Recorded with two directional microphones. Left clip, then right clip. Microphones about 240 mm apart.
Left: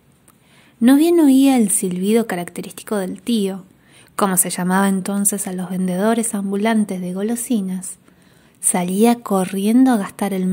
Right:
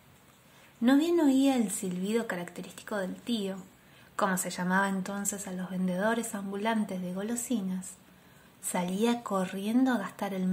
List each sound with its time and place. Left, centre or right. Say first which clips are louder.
0.8 s a woman's voice: left 12 dB; left